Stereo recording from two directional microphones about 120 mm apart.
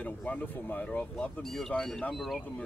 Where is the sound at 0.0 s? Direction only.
10° left (ahead or behind).